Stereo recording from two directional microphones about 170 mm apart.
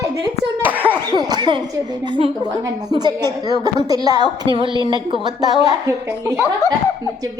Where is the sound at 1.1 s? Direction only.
25° right (ahead or behind).